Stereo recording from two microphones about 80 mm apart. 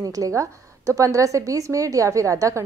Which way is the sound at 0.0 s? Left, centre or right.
Right.